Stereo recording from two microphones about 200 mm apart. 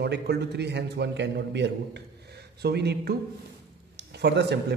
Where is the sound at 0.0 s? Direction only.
55° right (ahead or behind).